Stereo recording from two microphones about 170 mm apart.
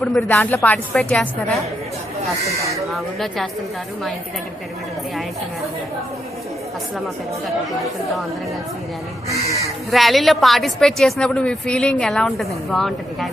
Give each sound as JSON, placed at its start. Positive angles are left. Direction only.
{"t": 0.0, "sound": "a woman's voice", "side_deg": 5}
{"t": 2.6, "sound": "speech", "side_deg": -20}
{"t": 2.8, "sound": "a woman's voice", "side_deg": 0}
{"t": 9.9, "sound": "a woman's voice", "side_deg": 0}